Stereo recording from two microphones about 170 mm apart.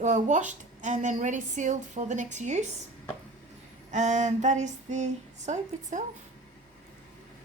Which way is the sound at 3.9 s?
45° right (ahead or behind).